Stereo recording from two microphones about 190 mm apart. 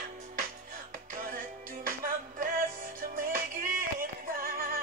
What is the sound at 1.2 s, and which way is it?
Music, 50° right (ahead or behind).